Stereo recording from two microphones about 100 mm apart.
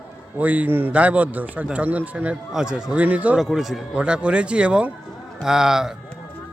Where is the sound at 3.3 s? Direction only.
5° right (ahead or behind).